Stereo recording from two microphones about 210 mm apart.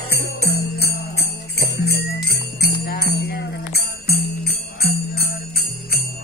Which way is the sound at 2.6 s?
45° left (ahead or behind).